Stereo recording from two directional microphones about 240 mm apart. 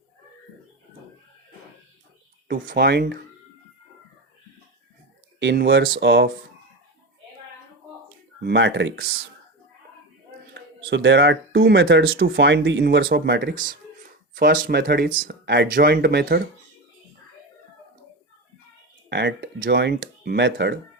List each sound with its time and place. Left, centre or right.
2.5 s speech: right
5.4 s speech: right
8.4 s speech: right
10.5 s speech: right
19.1 s speech: right